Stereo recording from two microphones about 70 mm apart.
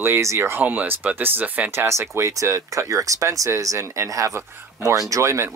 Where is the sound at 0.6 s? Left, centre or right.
Right.